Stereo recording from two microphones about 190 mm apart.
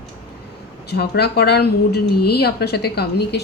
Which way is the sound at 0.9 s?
60° left (ahead or behind).